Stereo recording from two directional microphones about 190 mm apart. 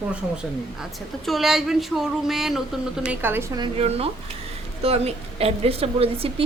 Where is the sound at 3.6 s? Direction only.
30° right (ahead or behind).